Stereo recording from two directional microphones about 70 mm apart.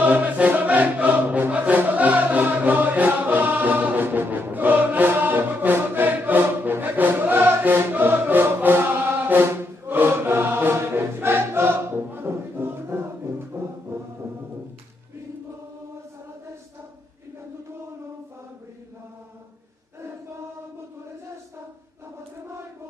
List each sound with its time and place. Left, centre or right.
0.0 s music: right